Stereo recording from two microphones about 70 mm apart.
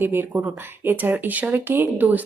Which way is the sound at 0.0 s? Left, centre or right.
Right.